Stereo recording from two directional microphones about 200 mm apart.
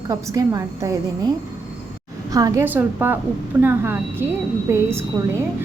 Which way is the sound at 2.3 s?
15° right (ahead or behind).